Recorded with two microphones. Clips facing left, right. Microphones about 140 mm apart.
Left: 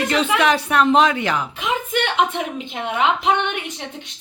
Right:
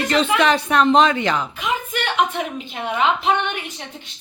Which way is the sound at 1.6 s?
20° left (ahead or behind).